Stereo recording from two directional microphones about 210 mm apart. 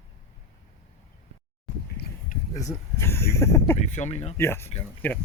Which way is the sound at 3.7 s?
35° left (ahead or behind).